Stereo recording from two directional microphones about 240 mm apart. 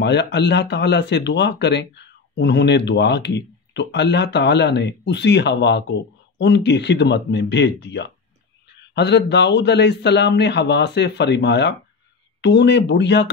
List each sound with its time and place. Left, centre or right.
0.0 s speech: left